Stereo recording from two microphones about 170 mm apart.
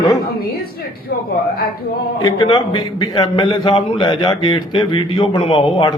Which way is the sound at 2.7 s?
25° left (ahead or behind).